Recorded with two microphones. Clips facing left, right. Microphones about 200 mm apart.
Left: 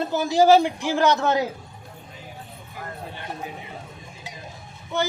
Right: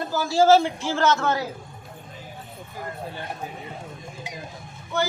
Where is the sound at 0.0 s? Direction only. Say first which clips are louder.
Left 1 dB; 20° left (ahead or behind).